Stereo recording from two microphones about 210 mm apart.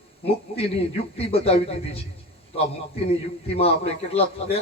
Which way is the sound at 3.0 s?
30° left (ahead or behind).